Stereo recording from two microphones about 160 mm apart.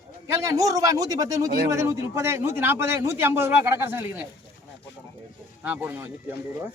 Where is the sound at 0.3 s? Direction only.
20° right (ahead or behind).